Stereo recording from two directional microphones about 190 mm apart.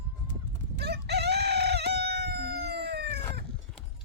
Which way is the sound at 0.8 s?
60° right (ahead or behind).